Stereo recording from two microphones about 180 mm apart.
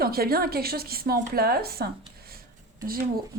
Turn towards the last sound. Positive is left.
turn(degrees=-55)  # may be behind; listen again after turning